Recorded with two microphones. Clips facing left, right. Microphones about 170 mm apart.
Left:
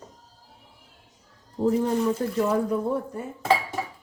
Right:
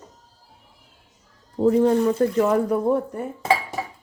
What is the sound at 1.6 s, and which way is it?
Speech, 65° right (ahead or behind).